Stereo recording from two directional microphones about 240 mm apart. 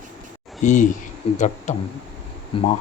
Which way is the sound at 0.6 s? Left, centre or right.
Left.